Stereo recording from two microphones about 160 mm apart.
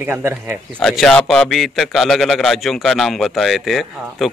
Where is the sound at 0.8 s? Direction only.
Centre (ahead or behind).